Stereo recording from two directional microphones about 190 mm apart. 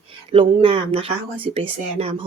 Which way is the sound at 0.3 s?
30° right (ahead or behind).